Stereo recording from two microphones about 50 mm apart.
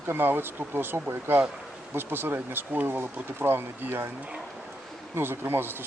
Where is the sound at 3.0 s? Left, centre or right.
Right.